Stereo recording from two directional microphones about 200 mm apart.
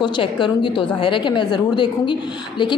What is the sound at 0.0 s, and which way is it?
A woman's voice, 25° left (ahead or behind).